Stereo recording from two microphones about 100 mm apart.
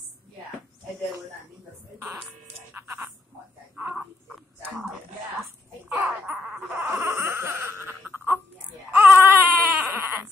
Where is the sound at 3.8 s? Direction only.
15° right (ahead or behind).